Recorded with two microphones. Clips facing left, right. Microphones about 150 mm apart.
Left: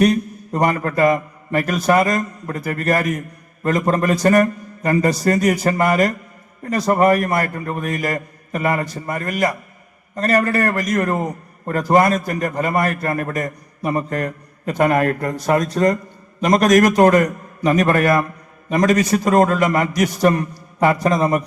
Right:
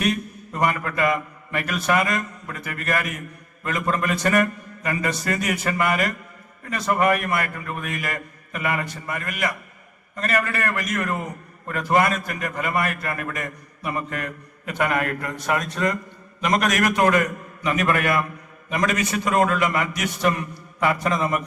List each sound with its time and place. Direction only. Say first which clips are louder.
0.0 s a man's voice: left 8 dB; 35° left (ahead or behind)